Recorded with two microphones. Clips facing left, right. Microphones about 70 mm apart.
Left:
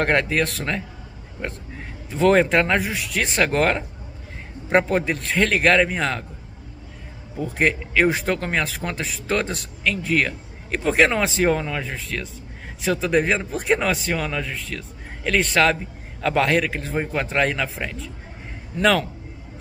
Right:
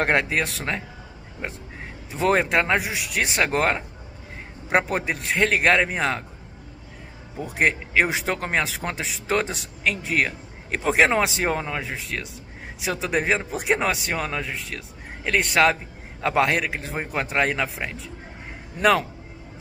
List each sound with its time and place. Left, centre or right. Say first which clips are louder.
0.0 s a man's voice: left 2 dB; centre
2.0 s a man's voice: left 4 dB; centre
7.3 s speech: left 1 dB; centre
11.8 s a man's voice: left 1 dB; centre
14.1 s speech: left 2 dB; right
15.2 s a man's voice: left 1 dB; centre
18.8 s a man's voice: even; centre